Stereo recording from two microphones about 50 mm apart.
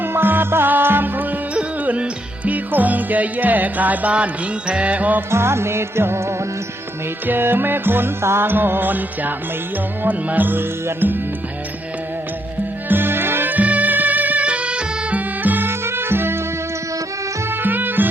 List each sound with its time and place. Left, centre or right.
0.0 s music: right
1.5 s music: right
5.3 s music: right
7.3 s music: right
12.9 s music: right
15.4 s music: right
15.8 s music: right
17.5 s music: right